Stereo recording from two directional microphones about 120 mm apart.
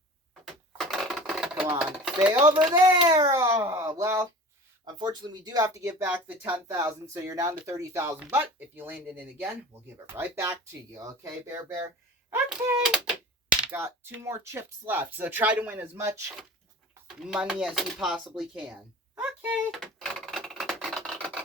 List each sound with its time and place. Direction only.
0.4 s a sound: centre (ahead or behind)
1.8 s speech: 5° right (ahead or behind)
2.7 s a child's voice: 35° right (ahead or behind)
4.9 s speech: 35° right (ahead or behind)
12.5 s speech: 5° right (ahead or behind)
13.6 s speech: 15° right (ahead or behind)
17.2 s speech: 5° right (ahead or behind)
19.7 s a sound: 5° left (ahead or behind)